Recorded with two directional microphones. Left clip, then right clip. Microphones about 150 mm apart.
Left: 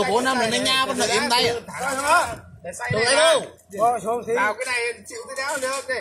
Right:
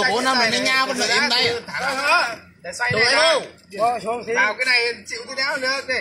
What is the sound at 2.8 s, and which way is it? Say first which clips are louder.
Speech: right 3 dB; 10° left (ahead or behind).